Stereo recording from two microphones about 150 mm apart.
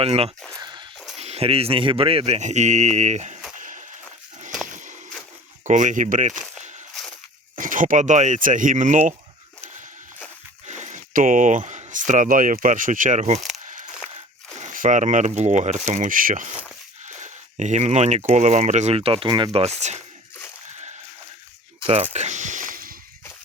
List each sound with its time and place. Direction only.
0.0 s speech: 45° right (ahead or behind)
0.5 s a sound: 30° right (ahead or behind)
1.2 s speech: 45° right (ahead or behind)
3.6 s a sound: 60° right (ahead or behind)
5.6 s speech: 55° right (ahead or behind)
7.5 s speech: 60° right (ahead or behind)
10.7 s speech: 50° right (ahead or behind)
14.6 s speech: 60° right (ahead or behind); by 19.5 s 30° right (ahead or behind)
19.8 s speech: 50° right (ahead or behind)
22.1 s a sound: 50° right (ahead or behind); by 23.0 s 70° right (ahead or behind)